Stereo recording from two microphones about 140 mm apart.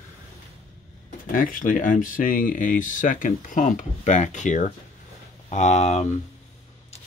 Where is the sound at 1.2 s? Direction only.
80° left; by 6.0 s 55° left (ahead or behind).